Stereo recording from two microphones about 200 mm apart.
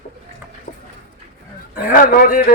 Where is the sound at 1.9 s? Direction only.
45° left (ahead or behind).